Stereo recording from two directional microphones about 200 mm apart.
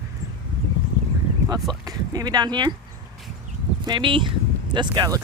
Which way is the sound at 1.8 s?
20° right (ahead or behind).